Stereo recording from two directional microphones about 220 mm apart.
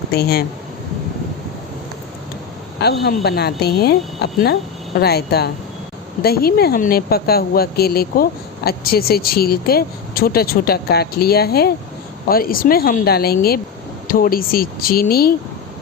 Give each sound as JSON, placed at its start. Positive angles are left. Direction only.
{"t": 0.1, "sound": "speech", "side_deg": 45}
{"t": 2.8, "sound": "speech", "side_deg": 45}